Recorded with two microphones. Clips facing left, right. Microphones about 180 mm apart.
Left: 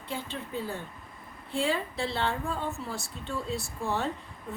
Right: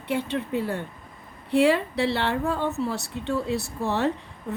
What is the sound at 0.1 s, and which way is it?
A woman's voice, 70° right (ahead or behind).